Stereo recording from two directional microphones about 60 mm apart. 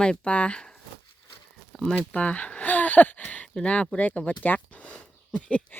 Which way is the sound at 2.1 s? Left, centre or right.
Left.